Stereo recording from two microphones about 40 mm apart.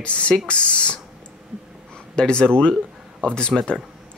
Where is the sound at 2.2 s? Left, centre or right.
Left.